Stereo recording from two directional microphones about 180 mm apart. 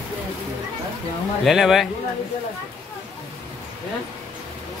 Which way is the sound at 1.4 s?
Centre (ahead or behind).